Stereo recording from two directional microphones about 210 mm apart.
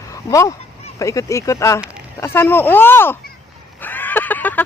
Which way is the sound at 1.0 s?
15° left (ahead or behind).